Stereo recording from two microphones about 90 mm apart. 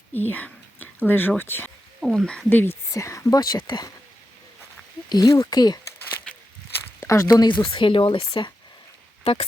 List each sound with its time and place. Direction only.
0.1 s whispering: 20° left (ahead or behind)
1.4 s speech: 25° left (ahead or behind)
2.0 s speech: 5° right (ahead or behind)
2.2 s speech: 10° left (ahead or behind)
2.5 s speech: 20° left (ahead or behind)
2.9 s speech: 35° left (ahead or behind); by 3.9 s 50° left (ahead or behind)
5.0 s speech: 45° left (ahead or behind)
7.0 s a sound: 35° left (ahead or behind)
7.4 s speech: 65° left (ahead or behind)
9.2 s speech: 90° left